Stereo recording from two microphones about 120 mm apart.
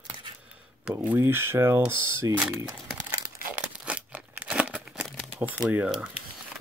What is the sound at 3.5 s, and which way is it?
Tearing, 10° right (ahead or behind).